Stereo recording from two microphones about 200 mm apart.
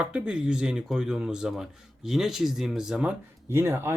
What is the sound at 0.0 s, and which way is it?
Speech, 5° right (ahead or behind).